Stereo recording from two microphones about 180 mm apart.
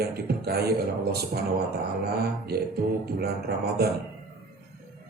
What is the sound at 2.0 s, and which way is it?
Speech, 60° right (ahead or behind).